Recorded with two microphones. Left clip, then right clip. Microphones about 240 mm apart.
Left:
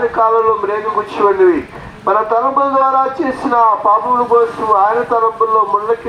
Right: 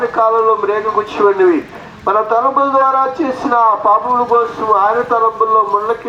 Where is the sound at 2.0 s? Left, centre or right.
Right.